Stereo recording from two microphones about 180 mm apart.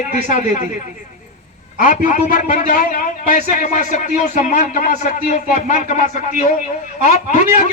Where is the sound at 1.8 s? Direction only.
45° left (ahead or behind).